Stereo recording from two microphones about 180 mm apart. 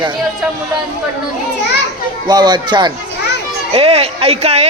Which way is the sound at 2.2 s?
25° right (ahead or behind).